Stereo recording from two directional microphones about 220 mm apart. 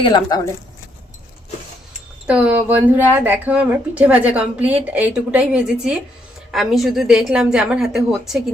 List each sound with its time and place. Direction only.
0.0 s speech: 20° left (ahead or behind)
2.2 s a woman's voice: 5° right (ahead or behind)